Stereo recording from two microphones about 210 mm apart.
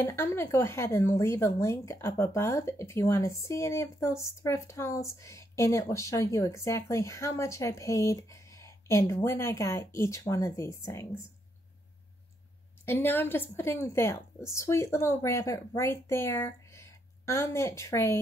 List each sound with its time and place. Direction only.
0.0 s speech: 10° left (ahead or behind)
12.8 s speech: 10° left (ahead or behind)